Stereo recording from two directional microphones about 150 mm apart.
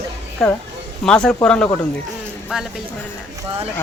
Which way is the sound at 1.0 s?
5° left (ahead or behind).